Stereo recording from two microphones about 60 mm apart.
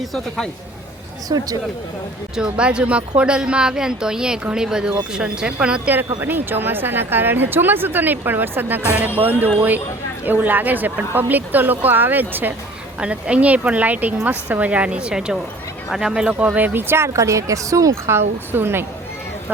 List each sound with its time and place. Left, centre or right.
0.0 s speech: centre
1.3 s speech: right
2.3 s a woman's voice: centre
6.2 s a woman's voice: right
13.0 s a woman's voice: centre
16.5 s a woman's voice: right
17.2 s a woman's voice: right
18.1 s a woman's voice: right